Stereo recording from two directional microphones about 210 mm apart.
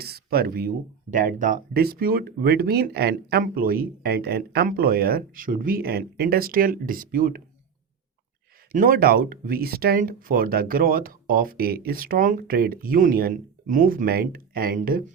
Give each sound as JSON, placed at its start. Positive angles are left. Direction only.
{"t": 0.0, "sound": "speech", "side_deg": -50}
{"t": 8.7, "sound": "speech", "side_deg": -40}